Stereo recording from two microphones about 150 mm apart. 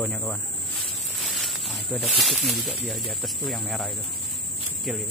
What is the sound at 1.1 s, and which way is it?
Snake, centre (ahead or behind).